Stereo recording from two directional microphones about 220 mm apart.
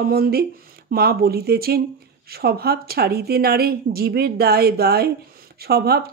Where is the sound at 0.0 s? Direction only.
45° right (ahead or behind).